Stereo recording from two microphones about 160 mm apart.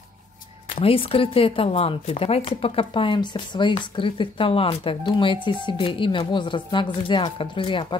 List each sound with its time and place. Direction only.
0.7 s speech: 35° left (ahead or behind)